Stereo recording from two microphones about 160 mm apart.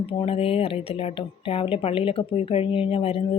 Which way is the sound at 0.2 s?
35° left (ahead or behind).